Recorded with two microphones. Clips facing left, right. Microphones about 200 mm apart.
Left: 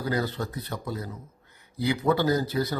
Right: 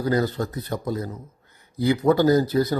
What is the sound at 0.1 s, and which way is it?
A man's voice, 45° right (ahead or behind).